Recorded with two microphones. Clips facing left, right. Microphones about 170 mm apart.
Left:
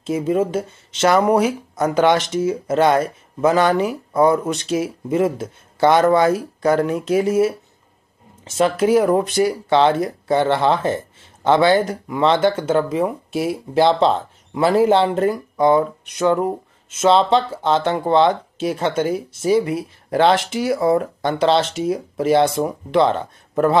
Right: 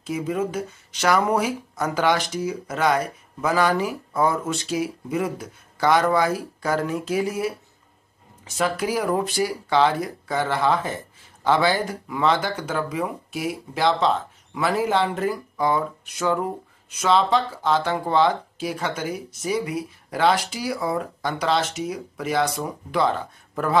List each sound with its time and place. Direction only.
0.0 s speech: 25° left (ahead or behind)